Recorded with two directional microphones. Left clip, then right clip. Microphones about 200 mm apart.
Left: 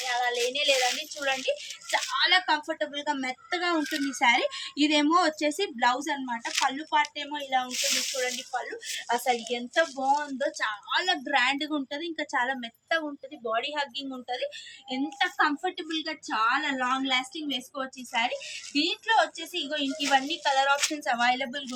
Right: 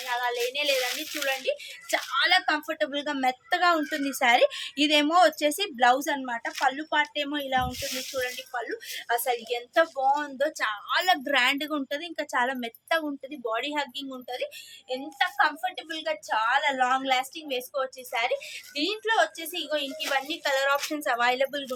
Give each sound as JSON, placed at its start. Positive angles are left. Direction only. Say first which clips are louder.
{"t": 0.1, "sound": "a sound", "louder": "even", "side_deg": -25}
{"t": 1.5, "sound": "speech", "louder": "even", "side_deg": -25}
{"t": 1.9, "sound": "speech", "louder": "right 1 dB", "side_deg": -45}
{"t": 8.2, "sound": "speech", "louder": "left 1 dB", "side_deg": -30}
{"t": 10.3, "sound": "speech", "louder": "right 2 dB", "side_deg": -45}
{"t": 13.5, "sound": "a woman's voice", "louder": "even", "side_deg": -40}